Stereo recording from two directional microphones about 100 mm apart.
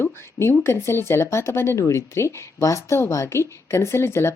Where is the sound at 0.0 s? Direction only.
25° left (ahead or behind).